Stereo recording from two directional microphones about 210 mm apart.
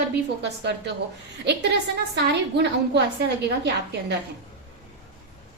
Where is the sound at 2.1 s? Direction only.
55° right (ahead or behind).